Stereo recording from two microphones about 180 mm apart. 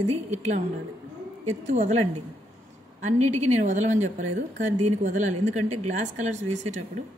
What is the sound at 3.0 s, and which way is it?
Speech, 40° right (ahead or behind).